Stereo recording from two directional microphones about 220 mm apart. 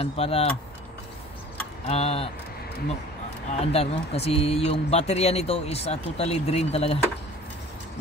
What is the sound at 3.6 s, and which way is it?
Speech, 25° left (ahead or behind).